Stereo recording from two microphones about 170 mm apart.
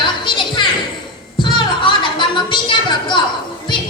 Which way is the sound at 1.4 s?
30° left (ahead or behind).